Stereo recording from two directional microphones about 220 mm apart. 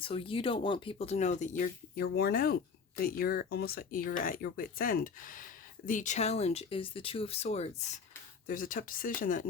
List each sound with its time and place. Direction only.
0.0 s speech: 25° left (ahead or behind)
8.4 s speech: 40° left (ahead or behind)